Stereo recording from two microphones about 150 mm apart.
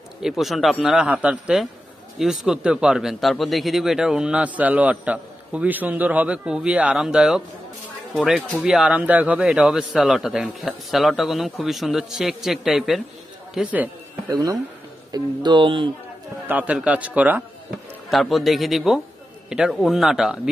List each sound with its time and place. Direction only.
0.2 s a man's voice: centre (ahead or behind)
14.3 s speech: 20° right (ahead or behind)
16.4 s a man's voice: 10° right (ahead or behind)